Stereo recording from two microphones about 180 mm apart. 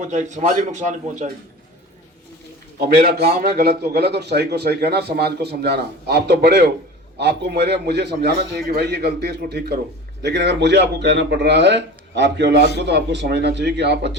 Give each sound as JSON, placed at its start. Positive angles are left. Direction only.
{"t": 0.0, "sound": "a man's voice", "side_deg": -40}
{"t": 2.8, "sound": "a man's voice", "side_deg": -60}